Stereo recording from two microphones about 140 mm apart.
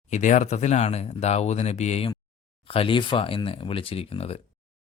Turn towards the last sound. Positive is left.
turn(degrees=45)  # may be behind; listen again after turning